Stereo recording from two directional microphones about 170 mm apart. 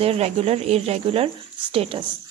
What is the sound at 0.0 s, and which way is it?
A woman's voice, 35° right (ahead or behind).